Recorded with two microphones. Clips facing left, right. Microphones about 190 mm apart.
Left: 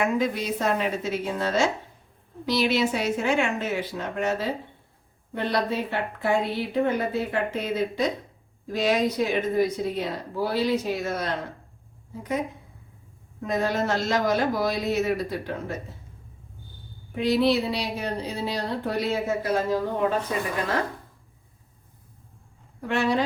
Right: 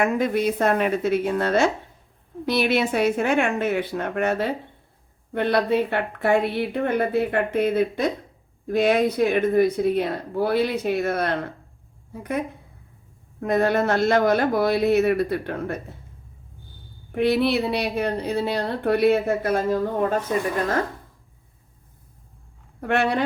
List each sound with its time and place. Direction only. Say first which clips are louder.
0.0 s speech: right 4 dB; 55° right (ahead or behind)
17.2 s speech: right 2 dB; 60° right (ahead or behind)
22.8 s speech: right 2 dB; 60° right (ahead or behind)